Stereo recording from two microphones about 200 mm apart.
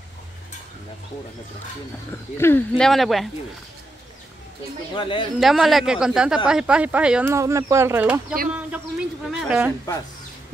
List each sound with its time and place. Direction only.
2.3 s speech: 10° left (ahead or behind)
4.9 s speech: 25° left (ahead or behind)
5.4 s speech: centre (ahead or behind)